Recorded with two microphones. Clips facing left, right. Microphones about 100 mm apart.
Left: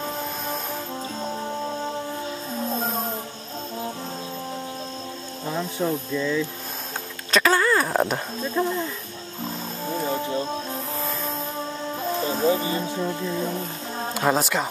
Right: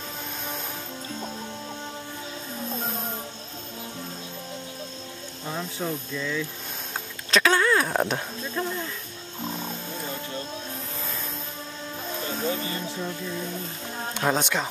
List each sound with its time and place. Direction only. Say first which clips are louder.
6.1 s speech: left 6 dB; 10° left (ahead or behind)
9.8 s music: left 8 dB; 30° left (ahead or behind)
12.2 s speech: left 7 dB; 35° left (ahead or behind)
14.1 s speech: left 3 dB; 5° left (ahead or behind)